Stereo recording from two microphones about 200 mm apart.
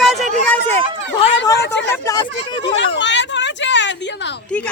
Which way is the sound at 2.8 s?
65° left (ahead or behind).